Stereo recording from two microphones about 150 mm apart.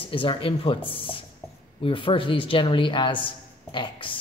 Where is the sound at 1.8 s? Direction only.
35° left (ahead or behind).